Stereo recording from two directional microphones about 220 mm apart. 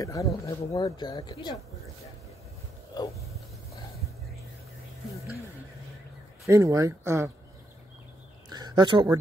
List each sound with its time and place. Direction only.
0.0 s speech: 15° left (ahead or behind)
2.9 s wild animals: 15° left (ahead or behind)
6.4 s speech: 15° right (ahead or behind)
8.5 s a sound: 20° right (ahead or behind)